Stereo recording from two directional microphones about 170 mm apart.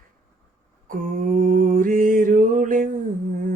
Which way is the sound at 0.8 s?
55° right (ahead or behind).